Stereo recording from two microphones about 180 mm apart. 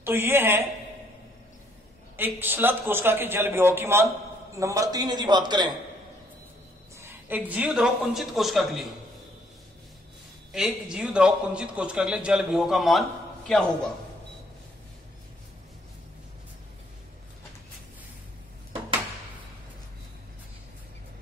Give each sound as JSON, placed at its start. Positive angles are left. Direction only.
{"t": 0.0, "sound": "a man's voice", "side_deg": -10}
{"t": 2.1, "sound": "a man's voice", "side_deg": -10}
{"t": 7.0, "sound": "a man's voice", "side_deg": -10}
{"t": 10.5, "sound": "a man's voice", "side_deg": -5}